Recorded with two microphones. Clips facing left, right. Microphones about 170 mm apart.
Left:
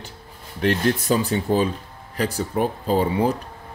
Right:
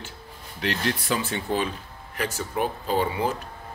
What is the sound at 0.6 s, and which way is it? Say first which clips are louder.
Speech: left 7 dB; 50° left (ahead or behind).